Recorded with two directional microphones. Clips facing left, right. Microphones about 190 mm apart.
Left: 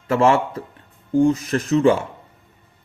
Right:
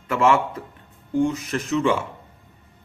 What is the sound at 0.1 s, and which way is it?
Speech, 35° left (ahead or behind).